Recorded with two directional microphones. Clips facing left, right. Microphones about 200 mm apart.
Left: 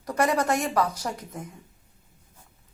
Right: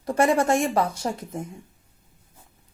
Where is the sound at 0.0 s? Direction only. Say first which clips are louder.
Right 4 dB; 25° right (ahead or behind).